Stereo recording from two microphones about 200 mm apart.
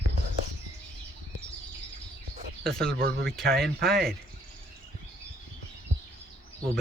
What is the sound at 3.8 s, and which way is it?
Speech, centre (ahead or behind).